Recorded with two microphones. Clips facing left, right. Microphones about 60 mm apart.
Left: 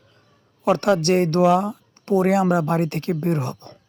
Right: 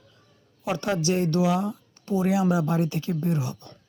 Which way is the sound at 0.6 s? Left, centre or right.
Left.